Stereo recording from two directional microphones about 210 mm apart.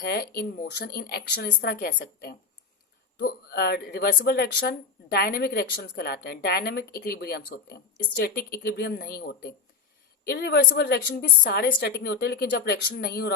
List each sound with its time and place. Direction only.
0.0 s a woman's voice: 45° left (ahead or behind)